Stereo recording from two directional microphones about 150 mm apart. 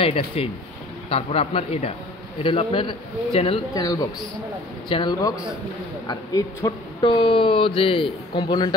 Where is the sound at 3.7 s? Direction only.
25° left (ahead or behind).